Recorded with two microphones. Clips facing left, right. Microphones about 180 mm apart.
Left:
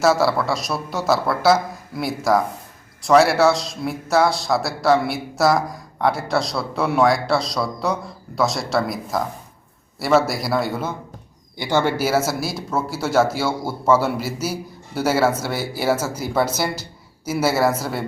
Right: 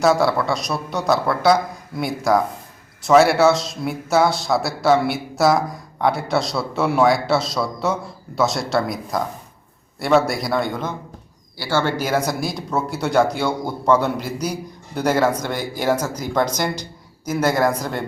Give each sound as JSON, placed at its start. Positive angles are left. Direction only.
{"t": 0.0, "sound": "a man's voice", "side_deg": 0}
{"t": 11.5, "sound": "speech", "side_deg": 20}